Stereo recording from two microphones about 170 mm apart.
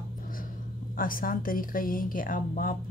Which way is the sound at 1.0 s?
55° left (ahead or behind).